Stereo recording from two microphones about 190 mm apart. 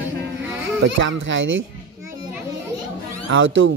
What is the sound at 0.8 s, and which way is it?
Speech, 75° right (ahead or behind).